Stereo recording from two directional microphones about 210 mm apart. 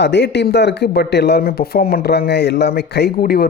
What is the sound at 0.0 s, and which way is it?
Speech, 55° left (ahead or behind).